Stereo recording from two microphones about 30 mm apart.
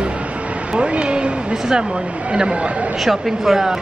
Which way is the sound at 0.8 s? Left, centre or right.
Right.